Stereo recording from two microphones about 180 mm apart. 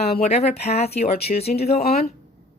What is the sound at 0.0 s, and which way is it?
Speech, 35° left (ahead or behind).